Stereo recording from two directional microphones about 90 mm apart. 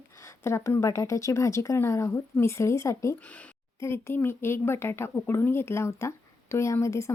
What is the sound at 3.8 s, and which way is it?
Speech, 30° left (ahead or behind).